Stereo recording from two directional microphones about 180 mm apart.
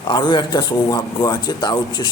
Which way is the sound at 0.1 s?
25° left (ahead or behind).